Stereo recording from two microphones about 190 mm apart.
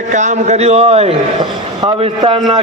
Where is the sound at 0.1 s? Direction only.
40° right (ahead or behind).